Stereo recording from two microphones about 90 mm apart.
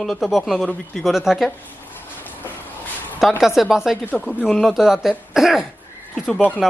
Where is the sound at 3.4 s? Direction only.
5° right (ahead or behind).